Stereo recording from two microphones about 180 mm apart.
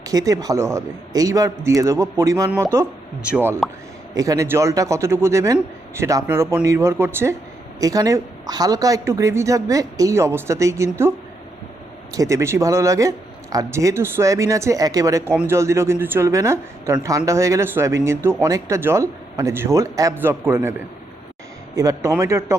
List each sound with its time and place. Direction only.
0.0 s a man's voice: 20° right (ahead or behind)
12.1 s a man's voice: 15° right (ahead or behind)
21.8 s a man's voice: 20° right (ahead or behind)